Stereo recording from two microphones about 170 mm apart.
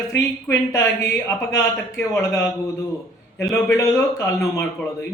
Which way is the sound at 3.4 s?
15° left (ahead or behind).